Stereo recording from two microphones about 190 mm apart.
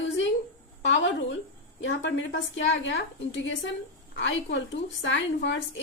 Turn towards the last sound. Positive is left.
turn(degrees=80)